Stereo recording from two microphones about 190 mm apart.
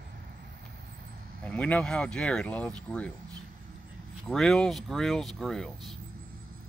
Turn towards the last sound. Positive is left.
turn(degrees=0)  # may be behind; listen again after turning